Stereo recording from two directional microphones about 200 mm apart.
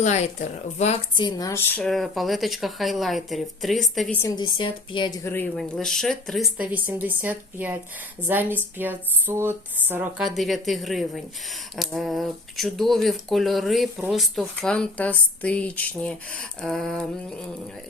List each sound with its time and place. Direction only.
0.0 s speech: 35° left (ahead or behind); by 4.2 s centre (ahead or behind)
4.2 s speech: 20° left (ahead or behind); by 17.3 s centre (ahead or behind)